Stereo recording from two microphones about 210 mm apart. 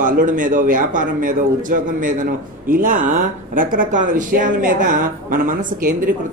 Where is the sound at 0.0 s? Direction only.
40° right (ahead or behind).